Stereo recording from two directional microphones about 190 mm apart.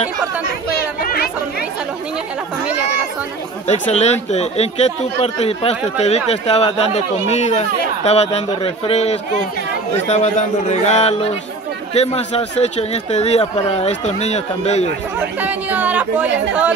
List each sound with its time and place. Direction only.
1.0 s chatter: 50° left (ahead or behind)
3.9 s a man's voice: 35° left (ahead or behind)
15.4 s speech: 10° right (ahead or behind)